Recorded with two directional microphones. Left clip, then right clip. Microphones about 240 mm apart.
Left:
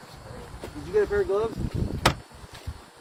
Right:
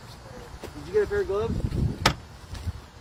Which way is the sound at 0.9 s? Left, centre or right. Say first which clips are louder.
Left 1 dB; left.